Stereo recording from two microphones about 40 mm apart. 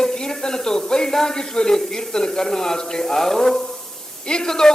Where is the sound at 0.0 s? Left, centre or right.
Centre.